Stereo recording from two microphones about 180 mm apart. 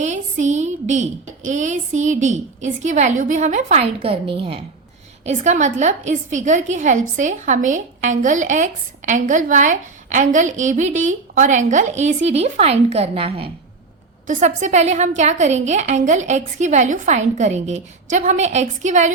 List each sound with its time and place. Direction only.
0.0 s a sound: 40° right (ahead or behind)
1.5 s a woman's voice: 45° right (ahead or behind)
5.2 s a woman's voice: 40° right (ahead or behind)
14.3 s a woman's voice: 45° right (ahead or behind)